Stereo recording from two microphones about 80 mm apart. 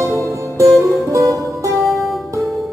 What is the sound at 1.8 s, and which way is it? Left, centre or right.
Music, centre.